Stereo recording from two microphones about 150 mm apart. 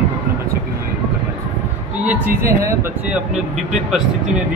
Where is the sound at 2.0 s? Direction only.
15° right (ahead or behind).